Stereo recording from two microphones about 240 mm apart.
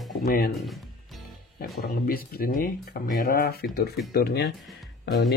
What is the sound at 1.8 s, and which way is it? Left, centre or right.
Speech, left.